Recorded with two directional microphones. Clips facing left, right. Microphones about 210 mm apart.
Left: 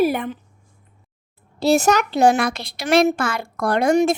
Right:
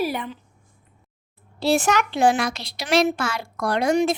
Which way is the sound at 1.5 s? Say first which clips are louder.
Left 4 dB; 40° left (ahead or behind).